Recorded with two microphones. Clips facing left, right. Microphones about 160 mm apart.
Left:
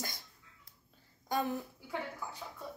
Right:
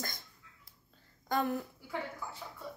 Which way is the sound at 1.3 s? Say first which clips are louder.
Right 2 dB; 15° left (ahead or behind).